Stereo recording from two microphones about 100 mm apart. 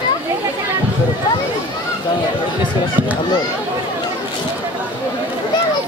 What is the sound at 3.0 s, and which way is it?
Speech, 20° right (ahead or behind).